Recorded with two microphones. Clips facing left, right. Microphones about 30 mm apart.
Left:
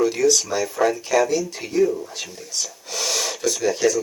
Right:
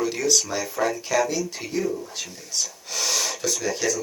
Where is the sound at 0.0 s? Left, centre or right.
Centre.